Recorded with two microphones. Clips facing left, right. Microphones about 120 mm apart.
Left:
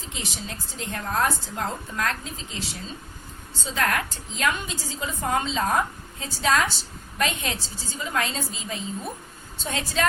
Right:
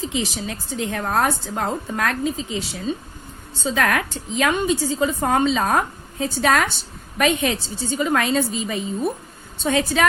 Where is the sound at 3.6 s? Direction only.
80° right.